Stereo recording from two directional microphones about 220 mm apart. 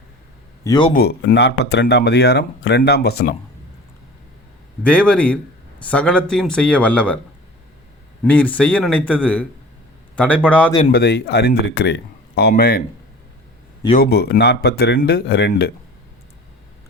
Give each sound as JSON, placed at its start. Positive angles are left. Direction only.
{"t": 0.6, "sound": "a man's voice", "side_deg": 20}
{"t": 0.9, "sound": "speech", "side_deg": 45}
{"t": 4.8, "sound": "a man's voice", "side_deg": 5}
{"t": 8.2, "sound": "a man's voice", "side_deg": 5}
{"t": 10.9, "sound": "speech", "side_deg": 45}
{"t": 14.0, "sound": "speech", "side_deg": 45}